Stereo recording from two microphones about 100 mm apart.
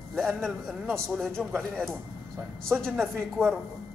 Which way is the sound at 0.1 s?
5° left (ahead or behind).